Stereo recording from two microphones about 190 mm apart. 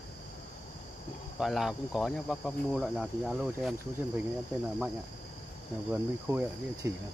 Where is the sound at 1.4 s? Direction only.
Centre (ahead or behind).